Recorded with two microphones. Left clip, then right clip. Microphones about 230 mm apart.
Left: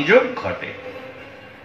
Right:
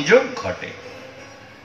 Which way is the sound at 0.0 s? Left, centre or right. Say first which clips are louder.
Left 1 dB; right.